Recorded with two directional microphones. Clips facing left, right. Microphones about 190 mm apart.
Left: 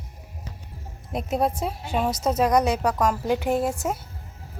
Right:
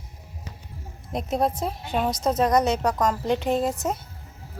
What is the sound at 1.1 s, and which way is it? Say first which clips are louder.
A woman's voice: even; 5° left (ahead or behind).